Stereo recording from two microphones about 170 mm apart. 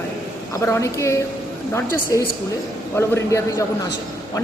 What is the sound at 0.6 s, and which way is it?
A woman's voice, 15° left (ahead or behind).